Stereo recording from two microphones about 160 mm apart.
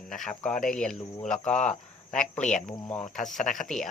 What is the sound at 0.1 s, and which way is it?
Speech, centre (ahead or behind).